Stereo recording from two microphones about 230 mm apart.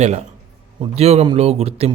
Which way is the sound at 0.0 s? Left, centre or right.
Right.